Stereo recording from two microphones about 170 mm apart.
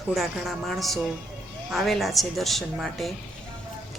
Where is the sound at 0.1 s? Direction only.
Centre (ahead or behind).